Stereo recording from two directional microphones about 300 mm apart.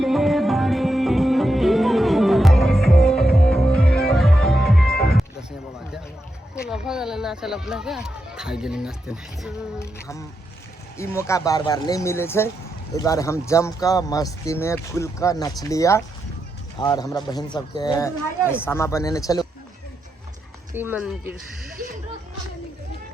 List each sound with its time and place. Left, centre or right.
0.0 s music: centre
4.9 s music: left
5.1 s music: centre
6.7 s speech: centre
9.7 s speech: centre
20.7 s speech: centre
21.8 s speech: right